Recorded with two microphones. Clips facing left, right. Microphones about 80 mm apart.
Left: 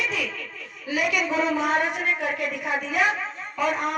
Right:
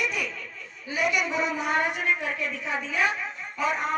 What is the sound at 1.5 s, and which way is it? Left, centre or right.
A woman's voice, left.